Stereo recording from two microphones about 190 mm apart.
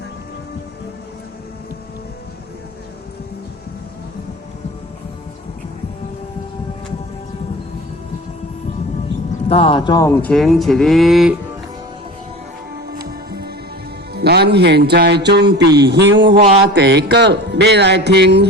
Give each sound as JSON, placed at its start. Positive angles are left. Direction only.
{"t": 9.5, "sound": "speech", "side_deg": 30}
{"t": 10.2, "sound": "speech", "side_deg": 5}
{"t": 13.1, "sound": "music", "side_deg": -55}